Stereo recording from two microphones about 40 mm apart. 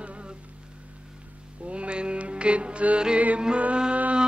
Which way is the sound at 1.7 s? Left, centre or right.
Right.